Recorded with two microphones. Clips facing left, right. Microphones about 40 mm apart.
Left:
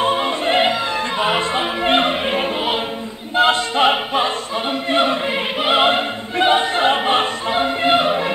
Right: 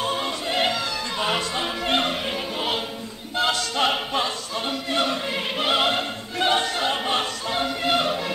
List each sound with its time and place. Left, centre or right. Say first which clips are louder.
0.0 s music: left 8 dB; left
3.3 s choir: left 8 dB; left